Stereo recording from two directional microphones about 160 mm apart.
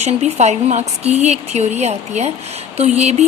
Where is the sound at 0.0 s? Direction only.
45° right (ahead or behind).